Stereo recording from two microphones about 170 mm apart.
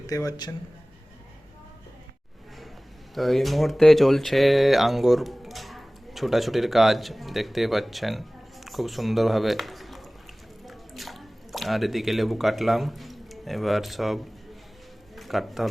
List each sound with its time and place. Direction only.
0.1 s a man's voice: 20° left (ahead or behind)
3.2 s speech: centre (ahead or behind)
15.1 s a sound: centre (ahead or behind)